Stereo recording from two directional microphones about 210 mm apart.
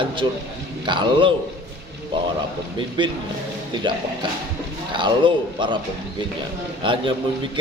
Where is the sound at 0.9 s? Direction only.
20° right (ahead or behind).